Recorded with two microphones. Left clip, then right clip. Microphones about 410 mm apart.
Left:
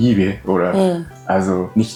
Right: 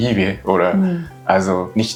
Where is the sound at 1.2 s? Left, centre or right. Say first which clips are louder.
Right 2 dB; right.